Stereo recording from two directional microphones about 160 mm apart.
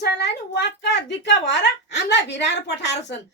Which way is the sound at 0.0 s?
90° left.